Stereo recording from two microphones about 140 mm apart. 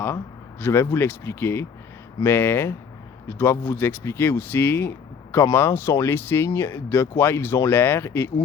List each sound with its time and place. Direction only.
0.6 s speech: 20° left (ahead or behind)